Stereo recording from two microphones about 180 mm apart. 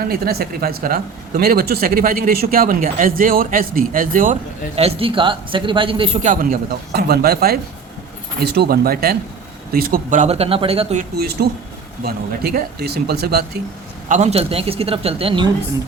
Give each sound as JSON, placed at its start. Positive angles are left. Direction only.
{"t": 0.0, "sound": "speech", "side_deg": -60}
{"t": 4.7, "sound": "a man's voice", "side_deg": -35}
{"t": 6.2, "sound": "speech", "side_deg": -50}
{"t": 11.2, "sound": "speech", "side_deg": -65}
{"t": 14.1, "sound": "speech", "side_deg": -40}